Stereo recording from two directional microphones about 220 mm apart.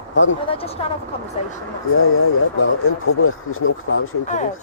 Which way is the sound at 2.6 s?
70° left (ahead or behind).